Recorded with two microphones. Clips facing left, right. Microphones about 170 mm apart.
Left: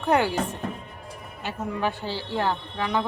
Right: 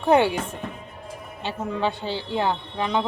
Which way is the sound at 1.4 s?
25° right (ahead or behind).